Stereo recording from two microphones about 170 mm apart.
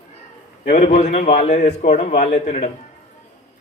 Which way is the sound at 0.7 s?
45° left (ahead or behind).